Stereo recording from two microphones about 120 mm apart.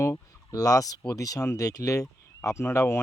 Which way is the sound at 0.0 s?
25° left (ahead or behind).